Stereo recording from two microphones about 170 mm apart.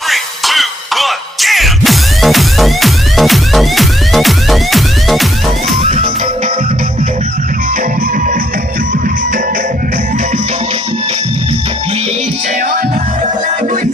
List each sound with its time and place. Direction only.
0.1 s music: centre (ahead or behind)
5.8 s music: 40° right (ahead or behind)